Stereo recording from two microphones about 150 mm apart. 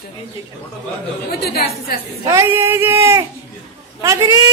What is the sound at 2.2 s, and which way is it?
Speech, 20° right (ahead or behind).